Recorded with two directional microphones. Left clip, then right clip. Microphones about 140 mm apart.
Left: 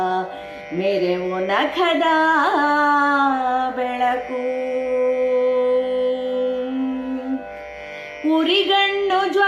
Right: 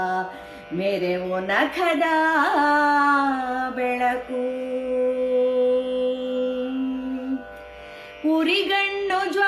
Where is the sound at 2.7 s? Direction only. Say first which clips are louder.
Left 2 dB; 55° right (ahead or behind).